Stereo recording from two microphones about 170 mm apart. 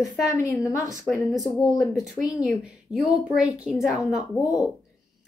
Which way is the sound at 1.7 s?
Centre (ahead or behind).